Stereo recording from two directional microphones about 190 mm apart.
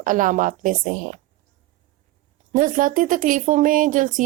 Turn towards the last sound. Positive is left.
turn(degrees=-45)  # may be behind; listen again after turning